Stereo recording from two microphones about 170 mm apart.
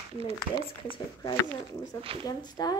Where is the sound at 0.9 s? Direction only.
25° left (ahead or behind).